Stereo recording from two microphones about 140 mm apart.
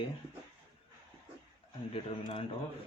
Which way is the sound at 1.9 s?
45° left (ahead or behind).